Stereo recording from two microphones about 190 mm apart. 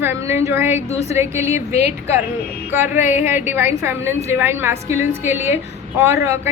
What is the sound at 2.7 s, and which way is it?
A woman's voice, 10° right (ahead or behind).